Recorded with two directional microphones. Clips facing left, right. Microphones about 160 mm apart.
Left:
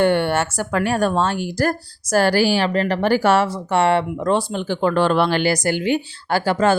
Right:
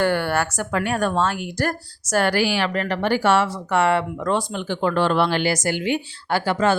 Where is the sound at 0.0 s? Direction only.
25° left (ahead or behind).